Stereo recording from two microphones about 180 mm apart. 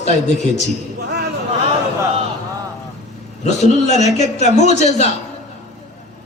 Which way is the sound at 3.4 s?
40° left (ahead or behind).